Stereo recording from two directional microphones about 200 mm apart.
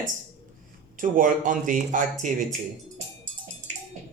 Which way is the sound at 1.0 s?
40° right (ahead or behind).